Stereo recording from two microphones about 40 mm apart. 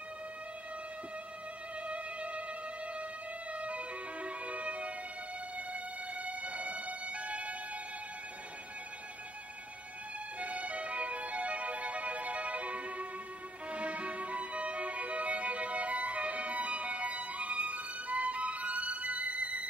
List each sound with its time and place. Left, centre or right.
1.9 s music: right
3.5 s music: right
10.4 s music: right
13.7 s violin: right